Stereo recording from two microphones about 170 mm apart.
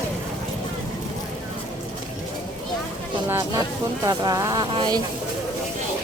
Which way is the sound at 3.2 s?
20° right (ahead or behind).